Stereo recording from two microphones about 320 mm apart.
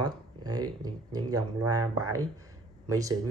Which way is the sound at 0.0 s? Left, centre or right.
Centre.